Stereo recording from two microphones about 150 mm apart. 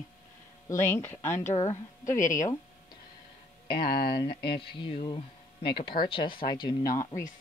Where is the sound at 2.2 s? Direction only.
60° left (ahead or behind).